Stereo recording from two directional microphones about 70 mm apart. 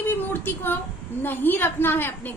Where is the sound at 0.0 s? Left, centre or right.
Left.